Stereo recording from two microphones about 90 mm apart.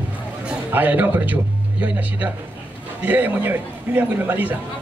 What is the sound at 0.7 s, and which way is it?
Speech, 20° right (ahead or behind).